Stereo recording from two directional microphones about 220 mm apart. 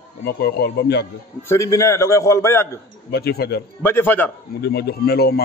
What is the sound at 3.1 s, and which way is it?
Speech, 45° left (ahead or behind).